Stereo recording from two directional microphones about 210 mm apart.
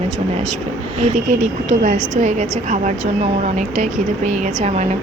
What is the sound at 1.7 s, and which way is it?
Speech, 35° right (ahead or behind).